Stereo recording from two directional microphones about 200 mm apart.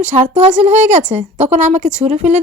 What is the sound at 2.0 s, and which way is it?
Speech, 35° right (ahead or behind).